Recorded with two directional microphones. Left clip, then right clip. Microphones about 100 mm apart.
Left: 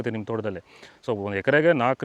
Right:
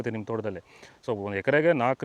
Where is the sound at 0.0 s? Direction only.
35° left (ahead or behind).